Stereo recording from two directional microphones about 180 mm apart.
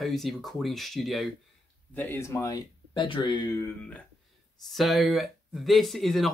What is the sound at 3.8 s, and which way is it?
Speech, 5° left (ahead or behind).